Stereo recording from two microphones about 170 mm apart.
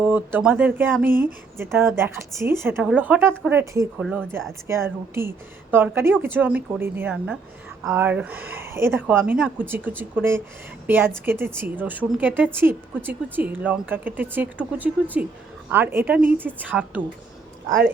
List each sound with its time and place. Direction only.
0.0 s speech: 10° right (ahead or behind)